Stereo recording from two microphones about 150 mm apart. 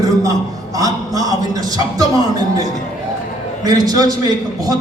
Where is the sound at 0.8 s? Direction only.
25° right (ahead or behind).